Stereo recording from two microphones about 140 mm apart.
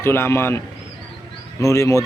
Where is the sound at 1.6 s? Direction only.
20° left (ahead or behind).